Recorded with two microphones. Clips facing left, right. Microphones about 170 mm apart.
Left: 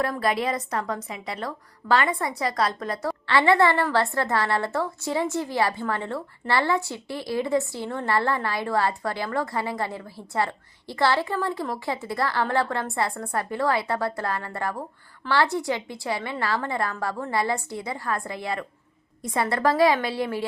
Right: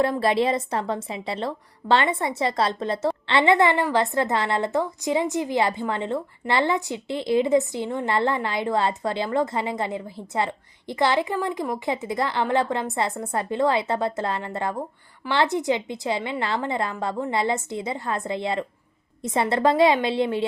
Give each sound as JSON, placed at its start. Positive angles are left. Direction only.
{"t": 0.0, "sound": "a woman's voice", "side_deg": -25}